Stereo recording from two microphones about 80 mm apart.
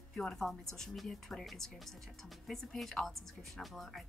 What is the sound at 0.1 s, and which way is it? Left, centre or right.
Speech, centre.